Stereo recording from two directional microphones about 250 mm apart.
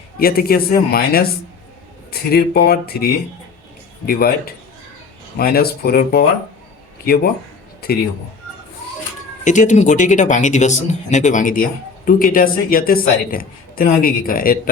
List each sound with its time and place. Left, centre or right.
0.2 s a man's voice: left
9.4 s speech: left